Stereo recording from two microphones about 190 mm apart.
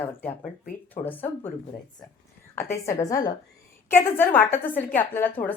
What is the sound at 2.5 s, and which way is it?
A woman's voice, 15° left (ahead or behind).